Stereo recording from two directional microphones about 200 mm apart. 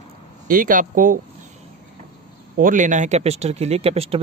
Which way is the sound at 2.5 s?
40° right (ahead or behind).